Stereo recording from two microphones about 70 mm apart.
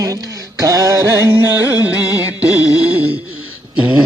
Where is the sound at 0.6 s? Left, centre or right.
Right.